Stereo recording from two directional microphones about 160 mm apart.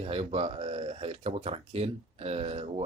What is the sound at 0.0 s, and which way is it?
Speech, 35° right (ahead or behind).